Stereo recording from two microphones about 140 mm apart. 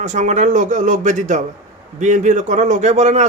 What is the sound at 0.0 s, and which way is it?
A man's voice, 60° right (ahead or behind).